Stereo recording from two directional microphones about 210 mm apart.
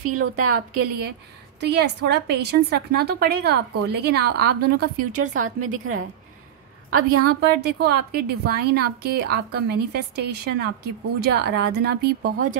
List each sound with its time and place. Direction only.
0.1 s a woman's voice: 90° right
0.6 s a woman's voice: 50° right (ahead or behind)
5.6 s a woman's voice: 90° right
6.9 s a woman's voice: 45° right (ahead or behind)